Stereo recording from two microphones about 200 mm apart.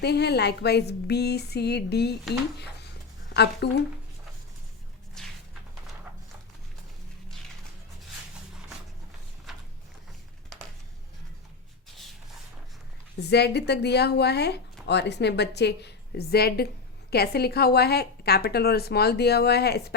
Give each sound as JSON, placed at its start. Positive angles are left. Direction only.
{"t": 0.0, "sound": "speech", "side_deg": 55}
{"t": 5.2, "sound": "walk", "side_deg": 5}
{"t": 13.1, "sound": "a woman's voice", "side_deg": 55}